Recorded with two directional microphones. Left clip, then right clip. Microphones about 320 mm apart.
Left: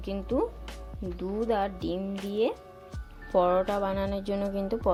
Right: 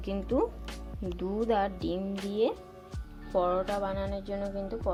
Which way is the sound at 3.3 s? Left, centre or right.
Centre.